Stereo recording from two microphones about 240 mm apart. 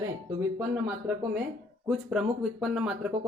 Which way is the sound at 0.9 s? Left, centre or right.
Centre.